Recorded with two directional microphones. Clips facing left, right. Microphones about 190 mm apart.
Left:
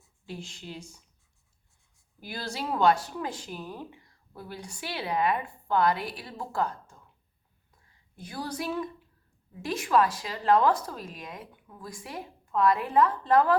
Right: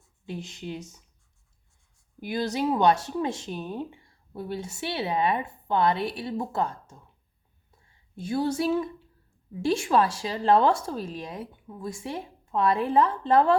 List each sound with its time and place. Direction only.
0.3 s speech: 20° right (ahead or behind)
2.2 s speech: 20° right (ahead or behind)